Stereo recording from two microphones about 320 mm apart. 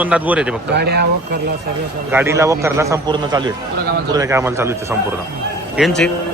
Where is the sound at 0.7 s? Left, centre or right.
Right.